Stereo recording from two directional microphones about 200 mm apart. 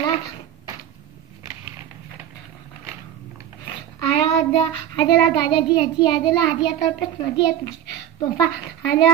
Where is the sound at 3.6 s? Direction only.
30° left (ahead or behind).